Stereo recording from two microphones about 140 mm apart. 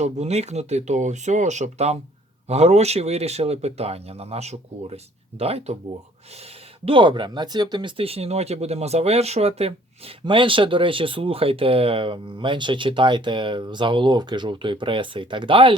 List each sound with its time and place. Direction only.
0.0 s speech: 50° right (ahead or behind)